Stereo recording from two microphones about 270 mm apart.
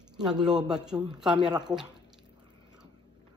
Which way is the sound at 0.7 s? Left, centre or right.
Centre.